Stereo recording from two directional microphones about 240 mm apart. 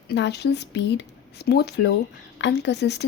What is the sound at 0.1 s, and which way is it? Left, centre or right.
Speech, left.